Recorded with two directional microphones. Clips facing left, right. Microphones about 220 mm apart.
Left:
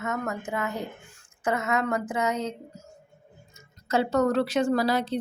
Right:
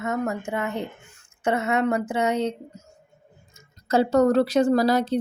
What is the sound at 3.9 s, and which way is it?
Speech, 35° right (ahead or behind).